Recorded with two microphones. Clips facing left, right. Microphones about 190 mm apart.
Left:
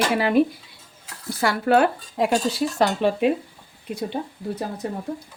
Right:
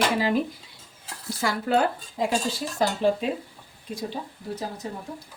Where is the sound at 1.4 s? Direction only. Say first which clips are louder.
Left 5 dB; 70° left (ahead or behind).